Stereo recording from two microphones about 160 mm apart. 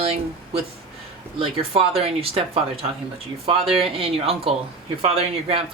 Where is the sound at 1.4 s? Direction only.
35° right (ahead or behind).